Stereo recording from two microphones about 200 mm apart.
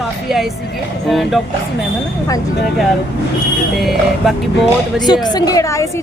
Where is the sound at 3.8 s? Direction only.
Centre (ahead or behind).